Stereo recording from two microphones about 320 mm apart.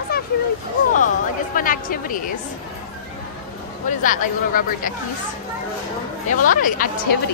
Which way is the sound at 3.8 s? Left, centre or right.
Left.